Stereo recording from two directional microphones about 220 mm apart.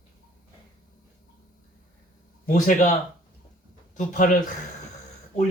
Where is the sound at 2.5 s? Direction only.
35° left (ahead or behind).